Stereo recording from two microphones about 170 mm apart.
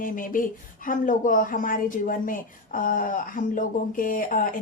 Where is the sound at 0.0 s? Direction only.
55° left (ahead or behind).